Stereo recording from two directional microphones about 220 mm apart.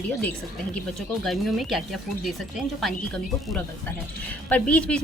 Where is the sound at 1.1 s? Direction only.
Centre (ahead or behind).